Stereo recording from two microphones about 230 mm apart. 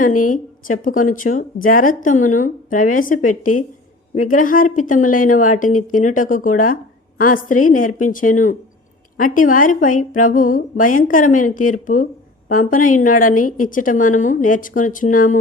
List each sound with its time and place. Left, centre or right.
0.3 s speech: left